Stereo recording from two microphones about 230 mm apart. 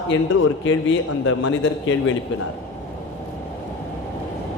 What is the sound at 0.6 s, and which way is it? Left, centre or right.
Speech, left.